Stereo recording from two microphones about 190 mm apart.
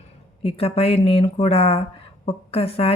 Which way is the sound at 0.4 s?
30° left (ahead or behind).